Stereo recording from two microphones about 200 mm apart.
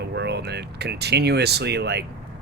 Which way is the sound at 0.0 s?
55° right (ahead or behind).